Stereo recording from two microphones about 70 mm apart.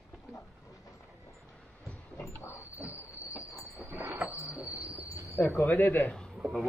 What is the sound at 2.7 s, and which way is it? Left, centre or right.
Train, right.